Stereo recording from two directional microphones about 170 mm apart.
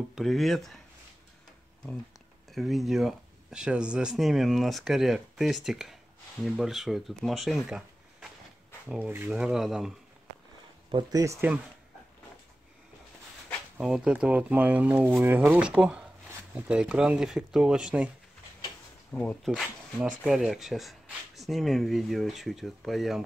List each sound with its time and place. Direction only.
0.1 s speech: centre (ahead or behind)
2.5 s speech: centre (ahead or behind)
10.9 s speech: 25° right (ahead or behind)
13.7 s speech: 5° right (ahead or behind)
19.1 s speech: 10° left (ahead or behind)
20.2 s speech: centre (ahead or behind)